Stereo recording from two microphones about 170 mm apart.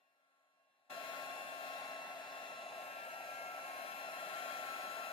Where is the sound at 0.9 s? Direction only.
30° left (ahead or behind).